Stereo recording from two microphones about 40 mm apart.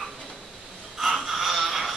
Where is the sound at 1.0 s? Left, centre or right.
Centre.